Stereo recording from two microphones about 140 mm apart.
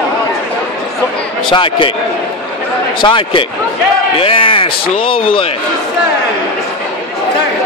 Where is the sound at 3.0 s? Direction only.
35° left (ahead or behind).